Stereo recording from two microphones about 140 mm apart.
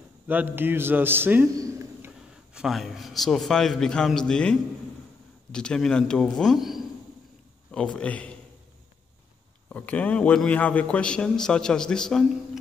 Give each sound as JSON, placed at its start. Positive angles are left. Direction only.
{"t": 0.3, "sound": "a man's voice", "side_deg": -15}
{"t": 1.5, "sound": "a sound", "side_deg": -20}
{"t": 2.5, "sound": "a man's voice", "side_deg": 0}
{"t": 9.7, "sound": "a man's voice", "side_deg": 10}